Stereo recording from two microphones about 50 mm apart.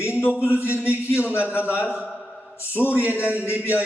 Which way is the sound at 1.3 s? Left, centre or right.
Left.